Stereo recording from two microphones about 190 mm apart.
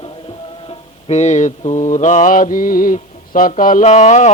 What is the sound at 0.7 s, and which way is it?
Mantra, 35° left (ahead or behind).